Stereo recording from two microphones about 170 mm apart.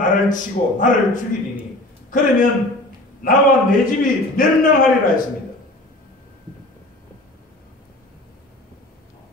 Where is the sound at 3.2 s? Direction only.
55° left (ahead or behind).